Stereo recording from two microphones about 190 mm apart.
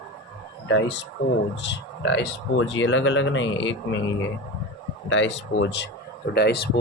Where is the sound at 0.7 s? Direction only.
70° left (ahead or behind).